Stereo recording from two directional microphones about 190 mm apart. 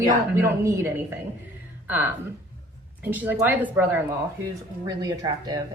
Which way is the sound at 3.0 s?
10° right (ahead or behind).